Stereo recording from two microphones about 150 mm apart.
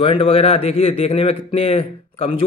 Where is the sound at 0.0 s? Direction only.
40° left (ahead or behind).